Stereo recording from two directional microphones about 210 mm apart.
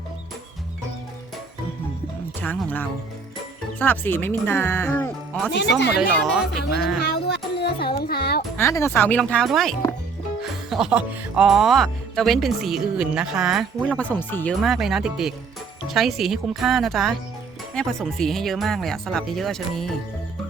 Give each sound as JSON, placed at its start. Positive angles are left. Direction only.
{"t": 2.4, "sound": "speech", "side_deg": 5}
{"t": 5.5, "sound": "speech", "side_deg": 55}
{"t": 6.0, "sound": "speech", "side_deg": 0}
{"t": 7.0, "sound": "music", "side_deg": 50}
{"t": 7.6, "sound": "speech", "side_deg": 50}
{"t": 8.5, "sound": "speech", "side_deg": 15}